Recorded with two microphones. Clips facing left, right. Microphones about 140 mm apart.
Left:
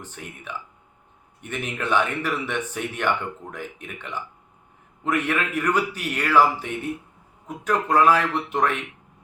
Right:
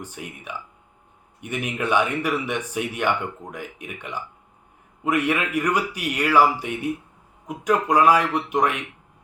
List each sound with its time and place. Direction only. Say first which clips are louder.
0.2 s speech: right 2 dB; 10° right (ahead or behind)
1.4 s speech: right 3 dB; 10° right (ahead or behind)